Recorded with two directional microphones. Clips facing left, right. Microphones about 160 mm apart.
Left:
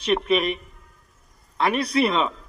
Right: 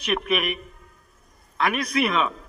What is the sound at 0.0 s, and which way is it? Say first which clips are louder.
A man's voice: left 4 dB; 30° left (ahead or behind).